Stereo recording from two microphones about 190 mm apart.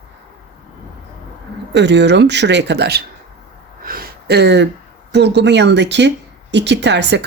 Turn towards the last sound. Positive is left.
turn(degrees=-65)  # may be behind; listen again after turning